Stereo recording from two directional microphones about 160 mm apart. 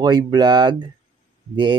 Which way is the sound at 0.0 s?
25° right (ahead or behind).